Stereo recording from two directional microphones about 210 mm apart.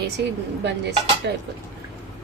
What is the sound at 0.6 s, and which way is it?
Dishes, 55° right (ahead or behind).